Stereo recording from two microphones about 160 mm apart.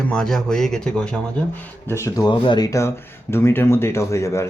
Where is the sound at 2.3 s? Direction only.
30° left (ahead or behind).